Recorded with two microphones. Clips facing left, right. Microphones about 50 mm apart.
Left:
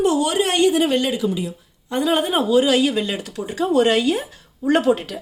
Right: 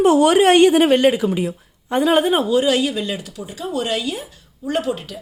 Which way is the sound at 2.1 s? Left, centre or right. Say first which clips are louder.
Even; centre.